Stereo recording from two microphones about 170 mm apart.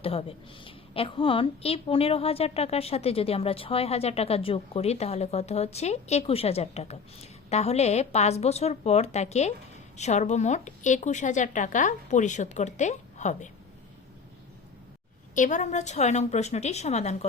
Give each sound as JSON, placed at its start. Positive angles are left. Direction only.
{"t": 0.0, "sound": "a woman's voice", "side_deg": 35}
{"t": 15.4, "sound": "a woman's voice", "side_deg": 45}